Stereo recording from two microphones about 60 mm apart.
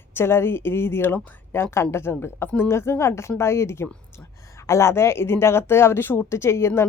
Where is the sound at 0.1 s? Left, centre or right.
Left.